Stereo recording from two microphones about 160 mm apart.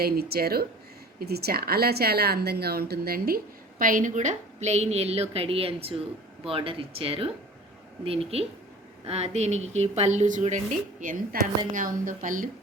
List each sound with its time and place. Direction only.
0.0 s a woman's voice: 75° right (ahead or behind); by 12.5 s 55° right (ahead or behind)